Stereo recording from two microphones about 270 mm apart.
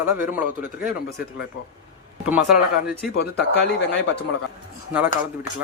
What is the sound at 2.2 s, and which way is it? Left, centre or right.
Speech, centre.